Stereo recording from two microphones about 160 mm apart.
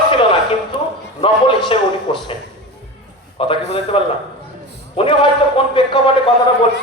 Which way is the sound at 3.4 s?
35° left (ahead or behind).